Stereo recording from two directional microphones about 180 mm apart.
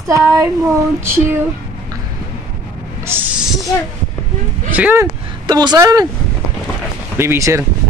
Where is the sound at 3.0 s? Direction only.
10° right (ahead or behind).